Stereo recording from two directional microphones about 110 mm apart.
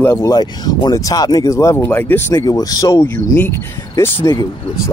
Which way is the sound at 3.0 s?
20° left (ahead or behind).